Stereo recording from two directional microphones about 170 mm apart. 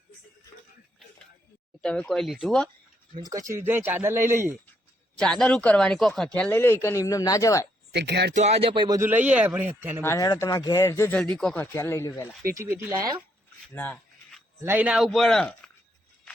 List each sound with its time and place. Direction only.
1.8 s speech: 5° left (ahead or behind)
3.2 s a man's voice: 20° right (ahead or behind)
5.1 s speech: 5° left (ahead or behind)
7.9 s speech: 80° right
8.4 s speech: 35° right (ahead or behind)
9.0 s a man's voice: 10° right (ahead or behind)
10.0 s speech: 20° left (ahead or behind)
11.2 s speech: 5° left (ahead or behind)
12.5 s a man's voice: 15° right (ahead or behind)
13.7 s a sound: 10° left (ahead or behind)
14.6 s speech: 10° right (ahead or behind)